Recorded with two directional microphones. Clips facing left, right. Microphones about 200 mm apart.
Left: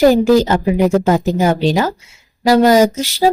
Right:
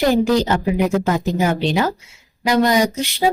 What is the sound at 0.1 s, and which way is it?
A woman's voice, 45° left (ahead or behind).